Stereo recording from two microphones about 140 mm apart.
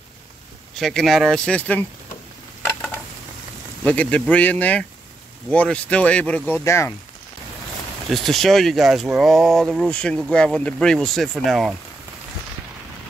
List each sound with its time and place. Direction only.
0.7 s speech: centre (ahead or behind)
3.8 s speech: 10° left (ahead or behind)
6.5 s speech: 20° left (ahead or behind)
8.1 s speech: centre (ahead or behind)